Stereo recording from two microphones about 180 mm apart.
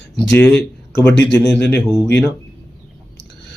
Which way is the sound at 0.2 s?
5° left (ahead or behind).